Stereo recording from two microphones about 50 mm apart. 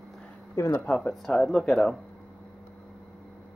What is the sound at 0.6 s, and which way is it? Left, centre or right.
Speech, left.